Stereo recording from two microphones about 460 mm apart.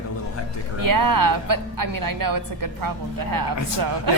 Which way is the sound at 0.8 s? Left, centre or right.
Right.